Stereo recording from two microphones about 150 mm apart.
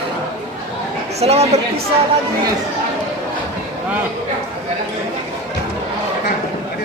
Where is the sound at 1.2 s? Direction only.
45° right (ahead or behind).